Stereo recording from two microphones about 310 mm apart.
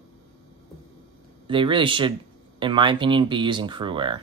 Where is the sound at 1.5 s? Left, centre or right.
Centre.